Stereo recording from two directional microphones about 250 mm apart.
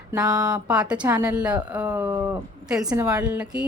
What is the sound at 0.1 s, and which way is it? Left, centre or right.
Speech, centre.